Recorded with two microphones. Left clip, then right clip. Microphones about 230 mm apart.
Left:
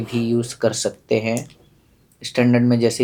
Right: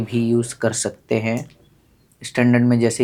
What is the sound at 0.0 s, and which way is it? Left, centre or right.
Speech, right.